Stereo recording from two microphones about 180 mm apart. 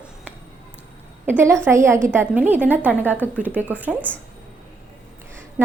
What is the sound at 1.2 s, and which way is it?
A woman's voice, 10° right (ahead or behind).